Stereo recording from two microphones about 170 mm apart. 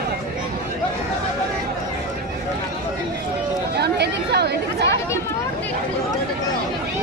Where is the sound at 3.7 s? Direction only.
75° right (ahead or behind).